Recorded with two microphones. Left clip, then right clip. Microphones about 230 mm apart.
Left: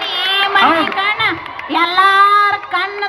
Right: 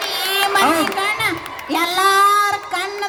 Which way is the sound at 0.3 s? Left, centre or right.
Right.